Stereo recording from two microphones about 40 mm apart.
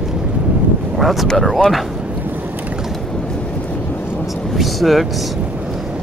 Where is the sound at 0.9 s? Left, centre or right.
Centre.